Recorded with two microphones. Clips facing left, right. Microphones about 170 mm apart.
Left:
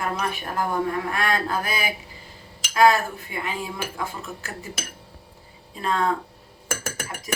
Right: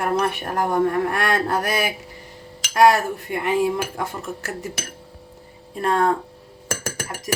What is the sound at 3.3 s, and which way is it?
A woman's voice, 65° right (ahead or behind).